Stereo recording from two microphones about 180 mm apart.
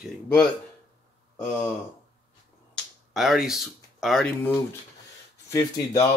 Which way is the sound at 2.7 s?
Centre (ahead or behind).